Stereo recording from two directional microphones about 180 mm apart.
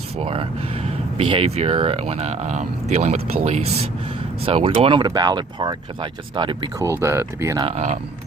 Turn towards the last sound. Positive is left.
turn(degrees=-40)  # may be behind; listen again after turning